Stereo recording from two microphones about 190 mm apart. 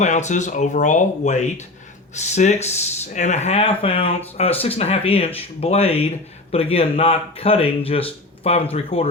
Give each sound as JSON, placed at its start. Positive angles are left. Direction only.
{"t": 0.0, "sound": "speech", "side_deg": 35}